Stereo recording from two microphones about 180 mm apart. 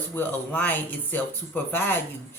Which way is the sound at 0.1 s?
10° left (ahead or behind).